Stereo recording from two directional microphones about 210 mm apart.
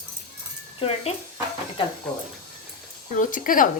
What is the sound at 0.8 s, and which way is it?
Speech, 30° left (ahead or behind).